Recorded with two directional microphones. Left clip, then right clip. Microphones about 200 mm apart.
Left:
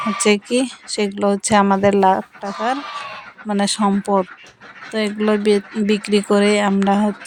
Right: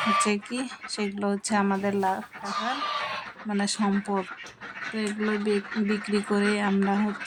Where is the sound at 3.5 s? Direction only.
40° left (ahead or behind).